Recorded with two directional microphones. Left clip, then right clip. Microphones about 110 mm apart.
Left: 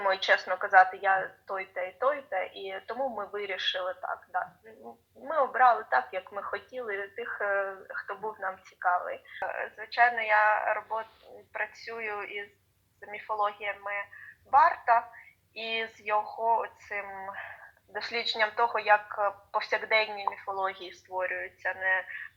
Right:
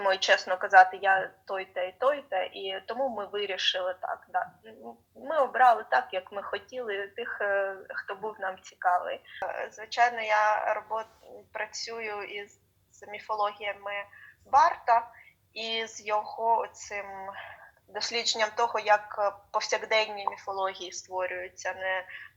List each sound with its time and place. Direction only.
0.0 s a woman's voice: 20° right (ahead or behind)
21.2 s speech: 25° right (ahead or behind)